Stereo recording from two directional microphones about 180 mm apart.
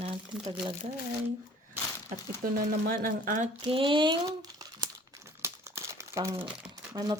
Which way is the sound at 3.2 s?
45° right (ahead or behind).